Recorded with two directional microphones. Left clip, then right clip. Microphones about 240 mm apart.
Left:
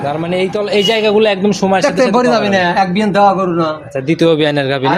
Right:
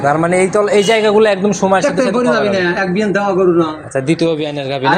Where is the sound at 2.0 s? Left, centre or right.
Left.